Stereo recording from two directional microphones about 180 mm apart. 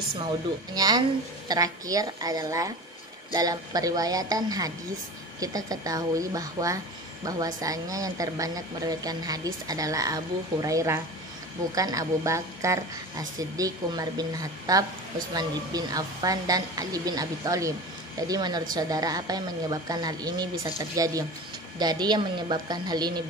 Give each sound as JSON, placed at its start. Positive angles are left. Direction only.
{"t": 0.7, "sound": "a woman's voice", "side_deg": -20}